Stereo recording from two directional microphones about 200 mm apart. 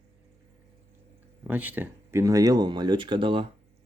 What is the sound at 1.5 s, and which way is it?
Speech, 10° right (ahead or behind).